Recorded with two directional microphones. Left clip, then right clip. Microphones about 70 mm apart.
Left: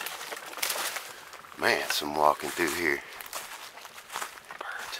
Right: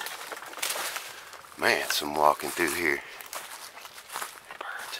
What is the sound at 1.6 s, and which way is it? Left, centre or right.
Speech, right.